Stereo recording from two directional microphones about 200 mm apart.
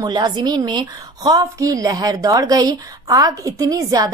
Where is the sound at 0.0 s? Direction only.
20° right (ahead or behind).